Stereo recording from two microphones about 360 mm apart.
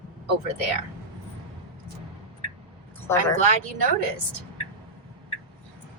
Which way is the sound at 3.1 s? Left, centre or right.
Centre.